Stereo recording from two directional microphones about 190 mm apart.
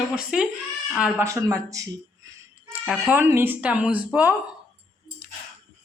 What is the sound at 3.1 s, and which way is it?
Speech, 10° right (ahead or behind).